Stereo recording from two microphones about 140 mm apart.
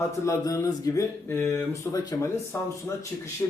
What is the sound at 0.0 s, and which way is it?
Speech, 20° left (ahead or behind).